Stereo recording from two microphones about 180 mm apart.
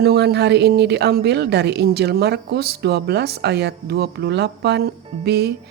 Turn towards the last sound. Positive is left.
turn(degrees=-65)  # may be behind; listen again after turning